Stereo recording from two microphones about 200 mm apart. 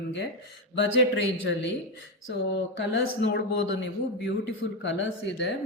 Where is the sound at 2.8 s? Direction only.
60° left (ahead or behind).